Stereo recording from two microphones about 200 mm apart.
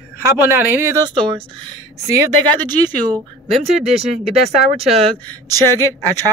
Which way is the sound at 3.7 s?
Centre (ahead or behind).